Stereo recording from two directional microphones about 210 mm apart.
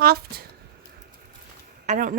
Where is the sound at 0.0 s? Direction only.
45° right (ahead or behind).